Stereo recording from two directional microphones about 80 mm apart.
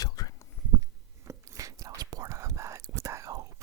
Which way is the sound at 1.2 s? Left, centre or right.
Right.